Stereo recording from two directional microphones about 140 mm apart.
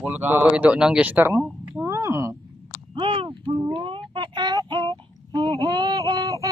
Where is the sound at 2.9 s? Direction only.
35° right (ahead or behind).